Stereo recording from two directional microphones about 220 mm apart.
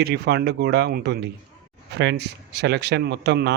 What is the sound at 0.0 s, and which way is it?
Speech, 50° right (ahead or behind).